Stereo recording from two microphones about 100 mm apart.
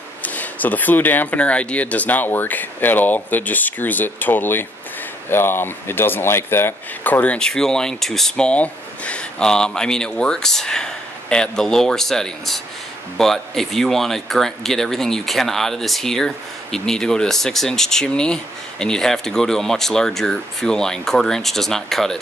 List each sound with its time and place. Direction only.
0.2 s speech: 15° left (ahead or behind)